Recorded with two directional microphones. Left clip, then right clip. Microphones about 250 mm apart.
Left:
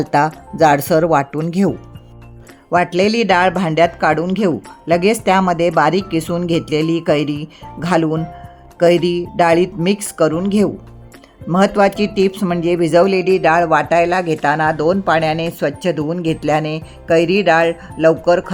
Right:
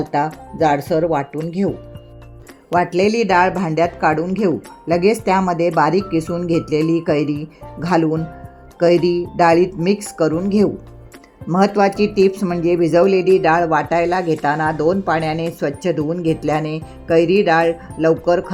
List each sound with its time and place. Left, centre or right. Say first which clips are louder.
0.1 s speech: left 5 dB; left
2.7 s speech: left 1 dB; centre